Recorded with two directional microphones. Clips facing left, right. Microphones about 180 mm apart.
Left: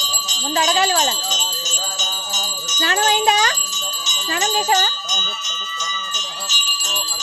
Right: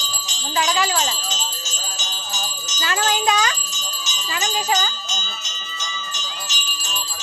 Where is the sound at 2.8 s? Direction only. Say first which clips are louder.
Left 3 dB; 30° left (ahead or behind).